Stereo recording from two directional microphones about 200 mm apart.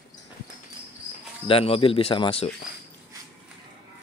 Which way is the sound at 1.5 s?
30° left (ahead or behind).